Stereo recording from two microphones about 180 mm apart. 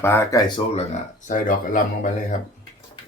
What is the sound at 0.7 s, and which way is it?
Speech, 40° left (ahead or behind).